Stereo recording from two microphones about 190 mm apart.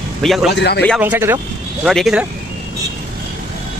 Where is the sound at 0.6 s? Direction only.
65° left (ahead or behind).